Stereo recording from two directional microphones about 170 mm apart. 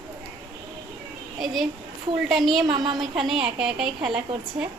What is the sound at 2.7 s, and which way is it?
Speech, 25° right (ahead or behind).